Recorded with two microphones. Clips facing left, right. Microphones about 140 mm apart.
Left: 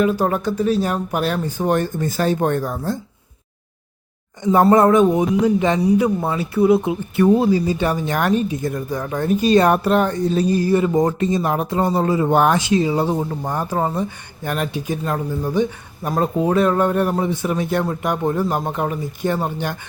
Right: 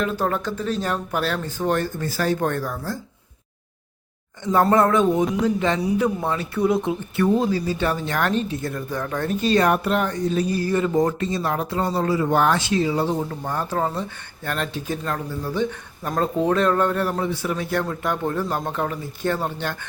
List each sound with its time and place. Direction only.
0.0 s speech: 15° left (ahead or behind)
4.7 s speech: 20° left (ahead or behind)
9.6 s speech: 35° left (ahead or behind)
10.6 s speech: 15° left (ahead or behind)